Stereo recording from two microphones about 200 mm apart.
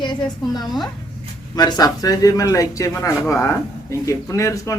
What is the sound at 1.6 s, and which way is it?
Speech, 20° left (ahead or behind).